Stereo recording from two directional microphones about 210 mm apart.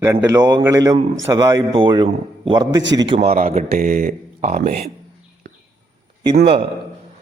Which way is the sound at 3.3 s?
40° right (ahead or behind).